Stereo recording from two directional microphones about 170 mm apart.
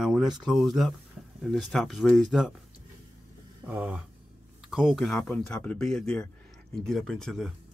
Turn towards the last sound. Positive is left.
turn(degrees=0)  # may be behind; listen again after turning